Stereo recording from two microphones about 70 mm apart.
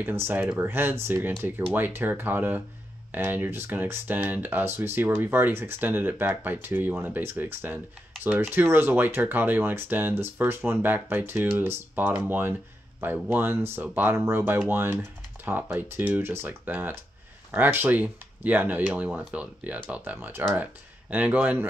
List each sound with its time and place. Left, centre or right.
0.0 s speech: right
15.9 s speech: right